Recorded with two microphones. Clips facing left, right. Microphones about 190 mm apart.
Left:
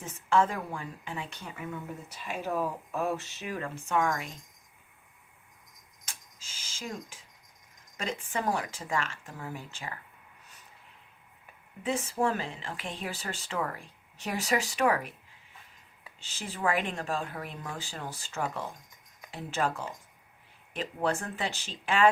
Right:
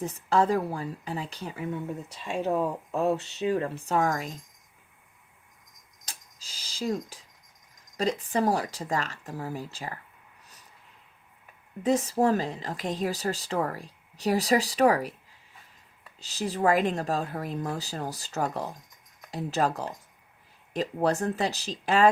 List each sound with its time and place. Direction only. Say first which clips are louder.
0.0 s speech: right 2 dB; 35° right (ahead or behind)
6.1 s a sound: right 2 dB; 35° right (ahead or behind)
7.9 s speech: right 7 dB; 35° right (ahead or behind)
11.8 s speech: right 6 dB; 40° right (ahead or behind)
16.2 s speech: right 6 dB; 40° right (ahead or behind)